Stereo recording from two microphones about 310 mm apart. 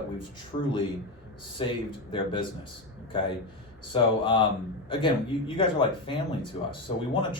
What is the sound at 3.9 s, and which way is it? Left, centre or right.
Speech, centre.